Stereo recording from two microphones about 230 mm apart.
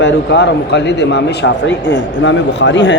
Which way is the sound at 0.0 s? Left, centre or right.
Left.